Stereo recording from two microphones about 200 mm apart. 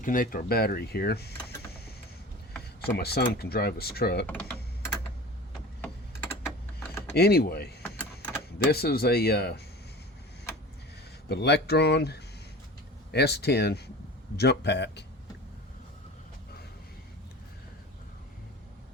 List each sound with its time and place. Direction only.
0.0 s speech: 45° left (ahead or behind)
2.8 s speech: 50° left (ahead or behind)
5.8 s a sound: 10° left (ahead or behind)
6.7 s computer keyboard: 10° left (ahead or behind)
7.2 s speech: 50° left (ahead or behind)
11.3 s speech: 55° left (ahead or behind)